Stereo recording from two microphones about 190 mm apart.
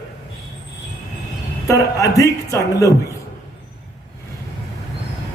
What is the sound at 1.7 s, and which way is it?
Music, 15° left (ahead or behind).